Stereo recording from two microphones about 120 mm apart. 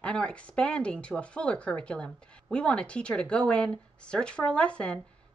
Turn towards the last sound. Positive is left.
turn(degrees=10)  # may be behind; listen again after turning